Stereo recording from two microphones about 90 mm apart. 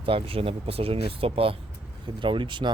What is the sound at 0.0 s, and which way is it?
Speech, 90° right.